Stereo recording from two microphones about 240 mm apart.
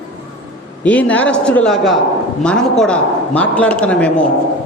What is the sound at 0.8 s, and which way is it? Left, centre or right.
A man's voice, centre.